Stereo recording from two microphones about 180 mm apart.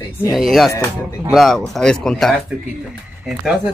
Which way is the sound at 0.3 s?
Centre (ahead or behind).